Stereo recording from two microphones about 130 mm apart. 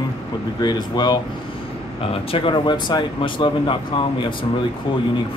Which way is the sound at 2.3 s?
40° left (ahead or behind).